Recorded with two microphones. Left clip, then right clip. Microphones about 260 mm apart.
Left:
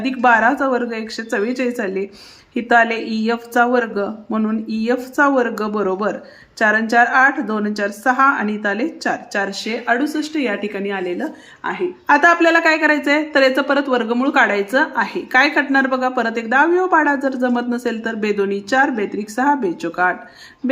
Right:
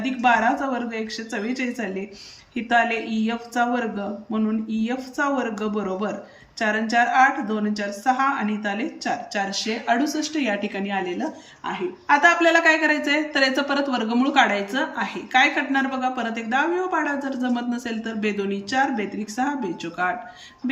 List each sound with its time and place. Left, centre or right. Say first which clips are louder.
0.0 s a woman's voice: left 6 dB; centre